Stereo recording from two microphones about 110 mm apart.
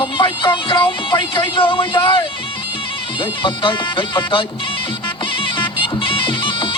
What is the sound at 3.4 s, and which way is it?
Speech, 45° left (ahead or behind).